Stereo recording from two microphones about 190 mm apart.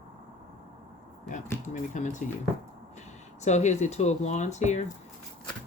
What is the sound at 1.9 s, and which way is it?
Speech, 40° left (ahead or behind).